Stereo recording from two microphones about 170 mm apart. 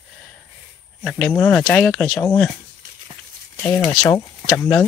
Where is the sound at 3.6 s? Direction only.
15° left (ahead or behind).